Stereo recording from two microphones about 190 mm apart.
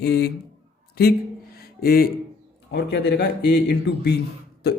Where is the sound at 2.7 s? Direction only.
60° left (ahead or behind).